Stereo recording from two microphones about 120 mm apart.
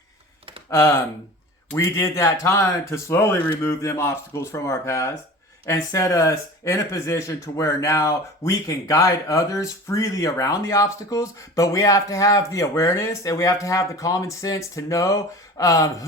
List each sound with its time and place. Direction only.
0.7 s speech: 25° left (ahead or behind)